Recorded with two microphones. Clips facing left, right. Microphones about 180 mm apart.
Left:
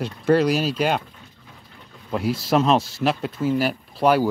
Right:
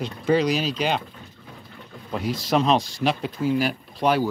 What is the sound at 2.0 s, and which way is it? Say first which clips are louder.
Speech: left 3 dB; 5° left (ahead or behind).